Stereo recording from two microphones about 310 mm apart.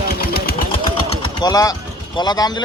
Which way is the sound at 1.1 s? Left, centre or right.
Centre.